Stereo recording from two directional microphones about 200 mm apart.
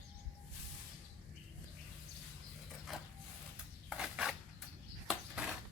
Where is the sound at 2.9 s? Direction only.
Centre (ahead or behind).